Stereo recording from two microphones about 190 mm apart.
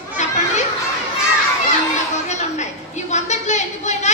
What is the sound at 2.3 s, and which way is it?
A woman's voice, 40° left (ahead or behind).